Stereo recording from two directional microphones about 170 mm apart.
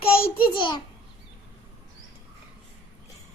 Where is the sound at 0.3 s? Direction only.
30° left (ahead or behind).